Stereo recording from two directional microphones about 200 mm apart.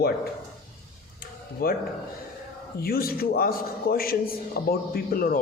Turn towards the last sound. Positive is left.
turn(degrees=45)  # may be behind; listen again after turning